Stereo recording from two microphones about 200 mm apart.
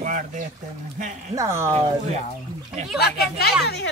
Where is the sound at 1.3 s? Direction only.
15° right (ahead or behind).